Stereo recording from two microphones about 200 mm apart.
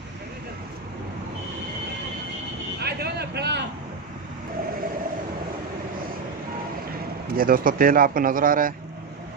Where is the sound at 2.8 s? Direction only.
55° right (ahead or behind).